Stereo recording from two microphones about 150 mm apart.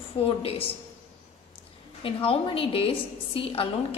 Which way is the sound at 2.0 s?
40° left (ahead or behind).